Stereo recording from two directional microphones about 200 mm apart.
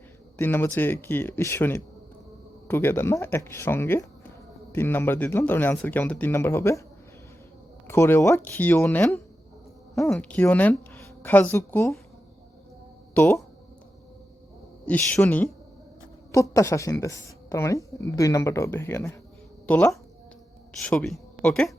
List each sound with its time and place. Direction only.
0.3 s a woman's voice: 10° left (ahead or behind)
7.9 s a woman's voice: 15° left (ahead or behind)
13.1 s a woman's voice: 10° left (ahead or behind)
14.8 s a woman's voice: 10° left (ahead or behind)